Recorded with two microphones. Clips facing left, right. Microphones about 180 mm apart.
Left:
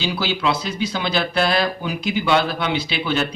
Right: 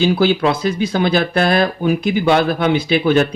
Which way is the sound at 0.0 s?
50° right (ahead or behind).